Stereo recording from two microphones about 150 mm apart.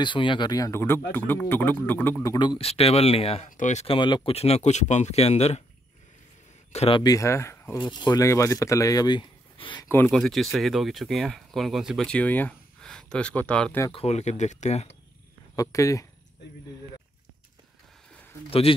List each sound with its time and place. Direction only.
0.0 s speech: 30° left (ahead or behind); by 2.1 s 15° left (ahead or behind)
2.2 s speech: 30° left (ahead or behind)
3.4 s speech: 55° left (ahead or behind)
3.8 s speech: 35° left (ahead or behind)
6.7 s speech: 45° left (ahead or behind)
7.0 s speech: 20° left (ahead or behind)
7.8 s speech: 30° left (ahead or behind)
10.0 s speech: centre (ahead or behind)
13.9 s speech: 45° left (ahead or behind)
15.5 s speech: 20° left (ahead or behind)